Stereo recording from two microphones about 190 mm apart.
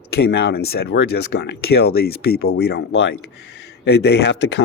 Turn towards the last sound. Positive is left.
turn(degrees=65)  # may be behind; listen again after turning